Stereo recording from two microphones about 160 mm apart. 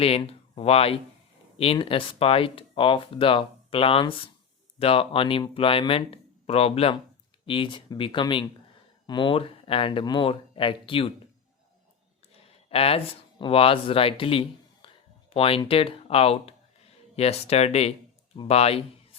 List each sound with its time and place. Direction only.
0.0 s speech: 35° left (ahead or behind)
12.6 s speech: 40° left (ahead or behind)